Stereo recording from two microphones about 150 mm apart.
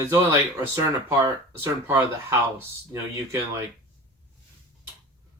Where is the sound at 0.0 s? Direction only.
20° right (ahead or behind).